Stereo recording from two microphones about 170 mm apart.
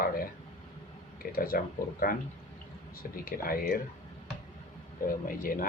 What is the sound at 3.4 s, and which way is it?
Speech, 60° left (ahead or behind).